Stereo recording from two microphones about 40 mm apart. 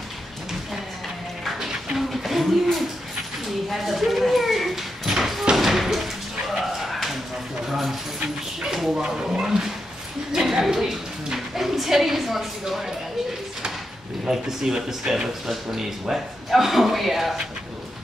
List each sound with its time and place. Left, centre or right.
2.0 s a sound: centre
5.6 s slam: centre
6.4 s a sound: centre
8.2 s dog: centre
8.9 s a woman's voice: centre
14.2 s a woman's voice: centre